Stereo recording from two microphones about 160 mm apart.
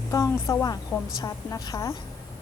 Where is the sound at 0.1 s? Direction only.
20° left (ahead or behind).